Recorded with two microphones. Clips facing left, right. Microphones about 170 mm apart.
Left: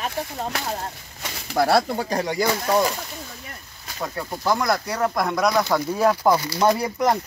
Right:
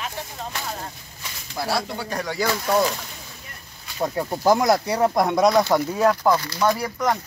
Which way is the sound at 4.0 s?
25° right (ahead or behind).